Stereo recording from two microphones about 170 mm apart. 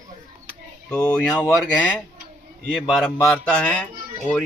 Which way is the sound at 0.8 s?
10° left (ahead or behind).